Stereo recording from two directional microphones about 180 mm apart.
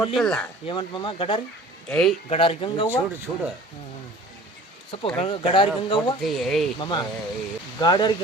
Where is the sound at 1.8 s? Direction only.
5° left (ahead or behind).